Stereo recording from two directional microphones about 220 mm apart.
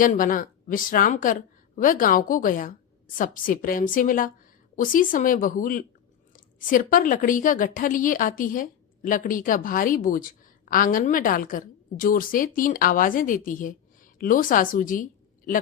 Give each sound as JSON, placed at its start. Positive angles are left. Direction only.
{"t": 0.0, "sound": "a woman's voice", "side_deg": 40}